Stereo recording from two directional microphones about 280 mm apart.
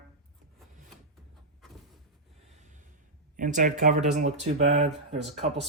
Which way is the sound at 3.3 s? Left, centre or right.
Right.